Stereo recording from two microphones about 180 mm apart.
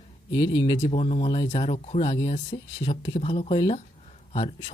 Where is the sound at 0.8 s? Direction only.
35° left (ahead or behind).